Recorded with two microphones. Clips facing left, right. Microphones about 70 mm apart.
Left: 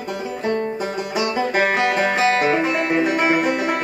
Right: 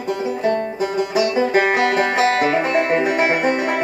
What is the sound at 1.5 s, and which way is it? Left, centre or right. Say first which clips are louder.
Music: right 2 dB; right.